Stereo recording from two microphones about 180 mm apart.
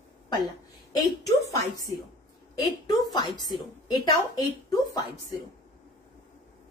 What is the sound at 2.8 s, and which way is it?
A woman's voice, 20° left (ahead or behind).